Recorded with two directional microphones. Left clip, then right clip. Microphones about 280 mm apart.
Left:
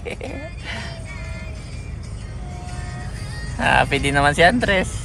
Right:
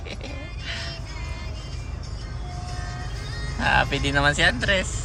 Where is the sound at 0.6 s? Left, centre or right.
Left.